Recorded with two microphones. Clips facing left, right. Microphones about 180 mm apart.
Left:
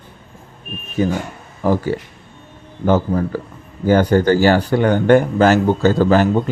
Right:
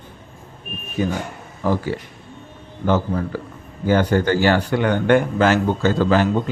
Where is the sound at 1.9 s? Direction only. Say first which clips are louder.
Left 4 dB; 45° left (ahead or behind).